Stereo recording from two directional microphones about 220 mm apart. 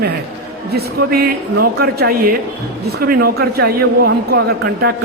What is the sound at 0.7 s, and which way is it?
Speech, 45° right (ahead or behind).